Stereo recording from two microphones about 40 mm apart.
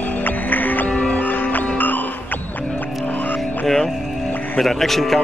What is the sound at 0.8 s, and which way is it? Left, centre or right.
Music, left.